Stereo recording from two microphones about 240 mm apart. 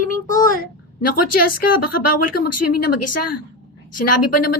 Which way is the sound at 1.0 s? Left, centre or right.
Left.